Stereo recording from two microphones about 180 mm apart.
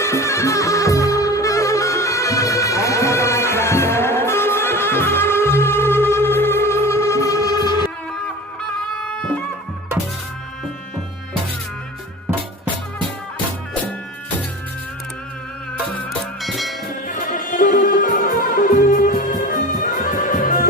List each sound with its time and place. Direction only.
0.0 s music: 15° left (ahead or behind)
15.9 s music: 5° left (ahead or behind)
17.1 s music: 50° left (ahead or behind)